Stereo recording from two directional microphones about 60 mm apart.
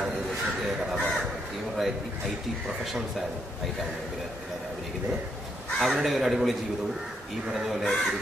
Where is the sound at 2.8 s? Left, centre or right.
Centre.